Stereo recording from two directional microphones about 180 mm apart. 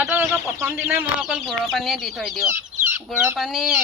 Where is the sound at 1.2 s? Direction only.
Centre (ahead or behind).